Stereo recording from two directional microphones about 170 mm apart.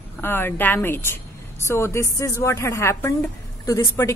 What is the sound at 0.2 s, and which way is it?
A woman's voice, 15° left (ahead or behind).